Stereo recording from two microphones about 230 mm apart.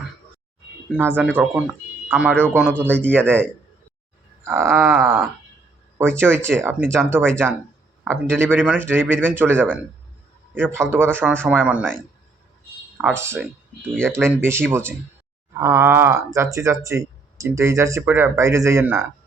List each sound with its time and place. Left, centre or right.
0.9 s speech: centre
4.4 s speech: centre
13.0 s speech: centre